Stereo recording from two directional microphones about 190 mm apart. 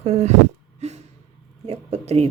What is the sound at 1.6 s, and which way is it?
Speech, 35° right (ahead or behind).